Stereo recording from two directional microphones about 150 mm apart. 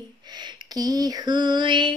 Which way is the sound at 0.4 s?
25° right (ahead or behind).